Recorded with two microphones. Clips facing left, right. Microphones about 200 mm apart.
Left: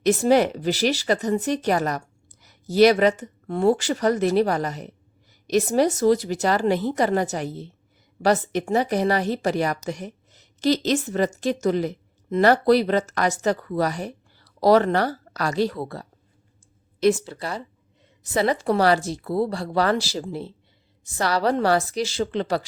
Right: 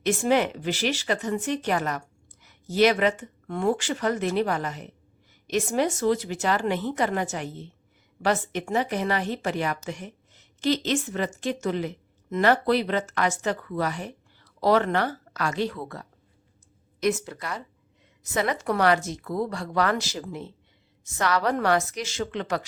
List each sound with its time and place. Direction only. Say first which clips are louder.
0.0 s speech: left 5 dB; 40° left (ahead or behind)